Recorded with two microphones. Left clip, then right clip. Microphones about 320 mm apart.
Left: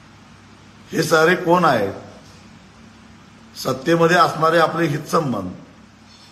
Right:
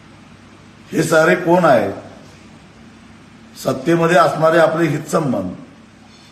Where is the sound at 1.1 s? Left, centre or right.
Centre.